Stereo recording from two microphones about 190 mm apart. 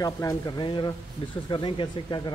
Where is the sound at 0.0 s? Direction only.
20° left (ahead or behind).